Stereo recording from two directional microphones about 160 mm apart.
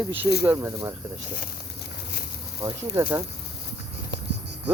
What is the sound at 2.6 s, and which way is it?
Speech, 15° right (ahead or behind).